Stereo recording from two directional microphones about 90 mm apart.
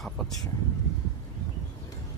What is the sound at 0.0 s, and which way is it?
Vehicle, 5° left (ahead or behind).